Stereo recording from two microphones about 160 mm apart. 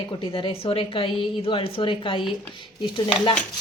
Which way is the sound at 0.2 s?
30° left (ahead or behind).